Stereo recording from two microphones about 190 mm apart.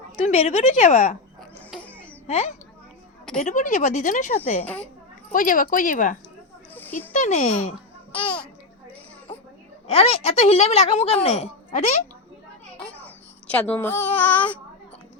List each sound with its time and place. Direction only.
0.3 s a woman's voice: 35° left (ahead or behind)
1.4 s a sound: 5° left (ahead or behind)
2.2 s a woman's voice: 35° left (ahead or behind)
6.7 s a sound: 10° left (ahead or behind)
7.1 s a woman's voice: 40° left (ahead or behind)
8.2 s a child's voice: 5° left (ahead or behind)
9.8 s a woman's voice: 30° left (ahead or behind)
13.5 s a child's voice: 5° left (ahead or behind)